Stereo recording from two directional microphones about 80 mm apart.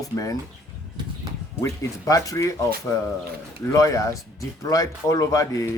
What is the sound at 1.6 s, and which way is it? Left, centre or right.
Speech, left.